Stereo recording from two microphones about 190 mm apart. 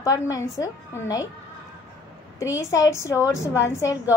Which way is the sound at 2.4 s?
15° left (ahead or behind).